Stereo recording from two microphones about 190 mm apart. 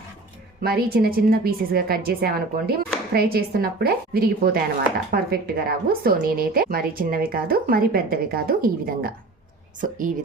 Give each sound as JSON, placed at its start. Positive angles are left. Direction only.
{"t": 0.6, "sound": "a woman's voice", "side_deg": -55}